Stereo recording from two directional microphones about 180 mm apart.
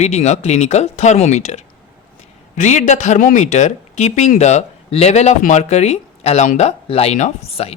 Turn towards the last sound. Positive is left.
turn(degrees=35)  # may be behind; listen again after turning